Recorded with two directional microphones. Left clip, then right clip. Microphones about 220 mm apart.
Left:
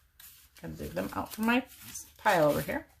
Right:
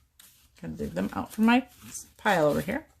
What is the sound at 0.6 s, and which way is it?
Speech, 35° right (ahead or behind).